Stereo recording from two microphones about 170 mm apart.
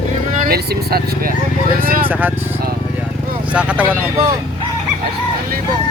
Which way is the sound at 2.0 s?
10° right (ahead or behind).